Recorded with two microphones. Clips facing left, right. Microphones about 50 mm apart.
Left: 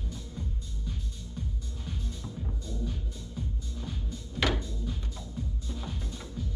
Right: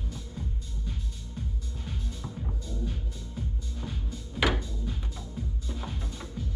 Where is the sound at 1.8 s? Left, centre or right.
Centre.